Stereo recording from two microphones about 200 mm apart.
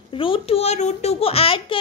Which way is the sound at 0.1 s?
25° left (ahead or behind).